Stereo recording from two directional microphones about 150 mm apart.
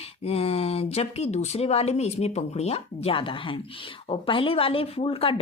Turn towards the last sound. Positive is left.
turn(degrees=40)  # may be behind; listen again after turning